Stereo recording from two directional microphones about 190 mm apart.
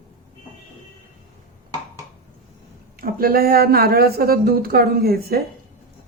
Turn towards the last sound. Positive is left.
turn(degrees=-55)  # may be behind; listen again after turning